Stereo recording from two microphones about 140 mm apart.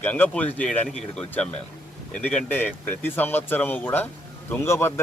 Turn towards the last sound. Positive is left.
turn(degrees=20)  # may be behind; listen again after turning